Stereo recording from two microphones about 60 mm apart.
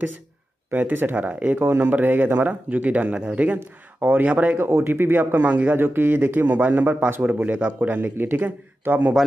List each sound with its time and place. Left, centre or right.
0.7 s speech: right
3.5 s speech: right
4.6 s speech: right